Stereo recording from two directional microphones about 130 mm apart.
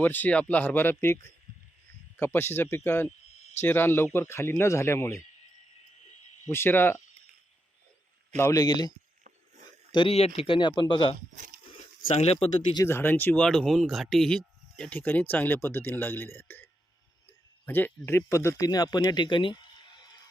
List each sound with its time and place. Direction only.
0.0 s speech: 15° left (ahead or behind)
3.2 s a sound: 60° left (ahead or behind)
3.6 s speech: 15° left (ahead or behind)
6.5 s speech: 15° left (ahead or behind)
8.4 s speech: 20° left (ahead or behind)
9.9 s speech: 45° left (ahead or behind)
11.7 s a sound: 50° left (ahead or behind)
12.7 s speech: 20° left (ahead or behind)
17.7 s speech: 15° left (ahead or behind); by 19.6 s 40° left (ahead or behind)